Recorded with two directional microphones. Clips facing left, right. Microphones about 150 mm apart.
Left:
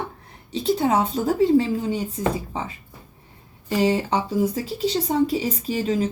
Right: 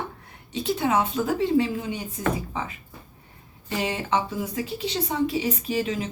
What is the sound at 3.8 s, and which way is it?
Speech, 35° left (ahead or behind).